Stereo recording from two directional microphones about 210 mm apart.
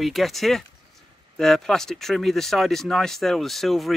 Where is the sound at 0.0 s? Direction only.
Centre (ahead or behind).